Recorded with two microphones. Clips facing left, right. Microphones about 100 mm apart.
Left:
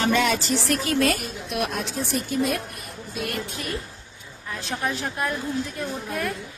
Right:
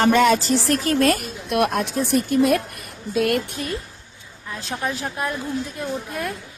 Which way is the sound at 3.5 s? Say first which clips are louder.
Right 3 dB; 30° right (ahead or behind).